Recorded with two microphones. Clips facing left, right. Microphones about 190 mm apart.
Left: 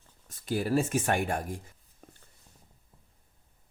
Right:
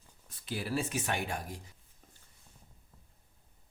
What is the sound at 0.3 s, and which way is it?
Speech, 45° left (ahead or behind).